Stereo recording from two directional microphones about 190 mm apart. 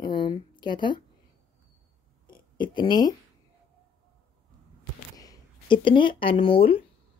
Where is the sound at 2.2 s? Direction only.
25° left (ahead or behind).